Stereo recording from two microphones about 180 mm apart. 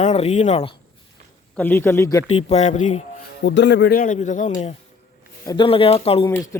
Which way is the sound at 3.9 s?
45° left (ahead or behind).